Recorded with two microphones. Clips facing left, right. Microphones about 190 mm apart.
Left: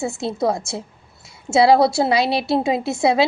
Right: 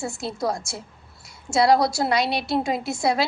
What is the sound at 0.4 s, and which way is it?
A woman's voice, 25° left (ahead or behind).